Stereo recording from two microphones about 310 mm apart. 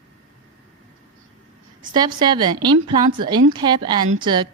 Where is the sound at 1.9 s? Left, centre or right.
Centre.